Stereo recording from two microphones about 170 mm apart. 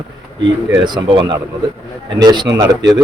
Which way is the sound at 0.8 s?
25° right (ahead or behind).